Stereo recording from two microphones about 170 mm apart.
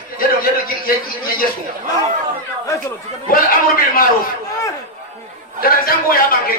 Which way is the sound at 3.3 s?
55° left (ahead or behind).